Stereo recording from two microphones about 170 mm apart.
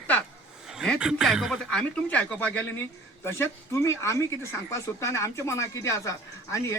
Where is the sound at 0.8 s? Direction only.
Centre (ahead or behind).